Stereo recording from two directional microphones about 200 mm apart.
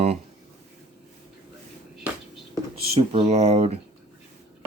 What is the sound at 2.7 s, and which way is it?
Speech, 30° right (ahead or behind).